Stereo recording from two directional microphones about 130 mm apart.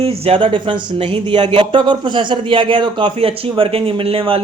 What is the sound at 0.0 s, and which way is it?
Speech, 50° right (ahead or behind).